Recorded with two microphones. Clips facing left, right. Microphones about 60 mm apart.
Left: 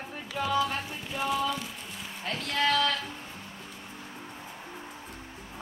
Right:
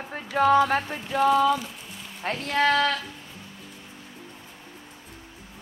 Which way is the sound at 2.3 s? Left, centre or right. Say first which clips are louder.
Right 5 dB; right.